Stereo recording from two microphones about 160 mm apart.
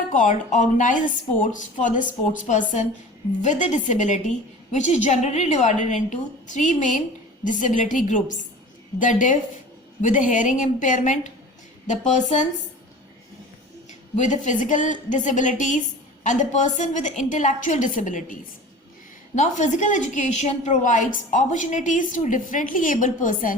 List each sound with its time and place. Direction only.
0.1 s a woman's voice: 50° left (ahead or behind)
14.2 s a woman's voice: 50° left (ahead or behind)
19.4 s a woman's voice: 50° left (ahead or behind)